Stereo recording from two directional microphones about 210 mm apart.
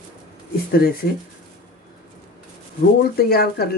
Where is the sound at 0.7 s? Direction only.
45° left (ahead or behind).